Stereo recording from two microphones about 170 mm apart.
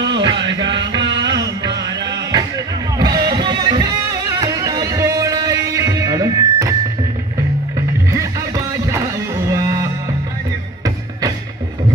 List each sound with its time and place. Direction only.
0.2 s music: 25° right (ahead or behind)
8.1 s music: 20° right (ahead or behind)